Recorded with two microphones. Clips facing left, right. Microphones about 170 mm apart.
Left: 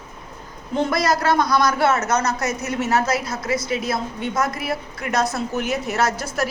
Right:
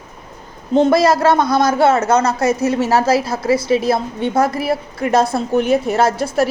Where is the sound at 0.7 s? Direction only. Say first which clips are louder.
Right 8 dB; 25° right (ahead or behind).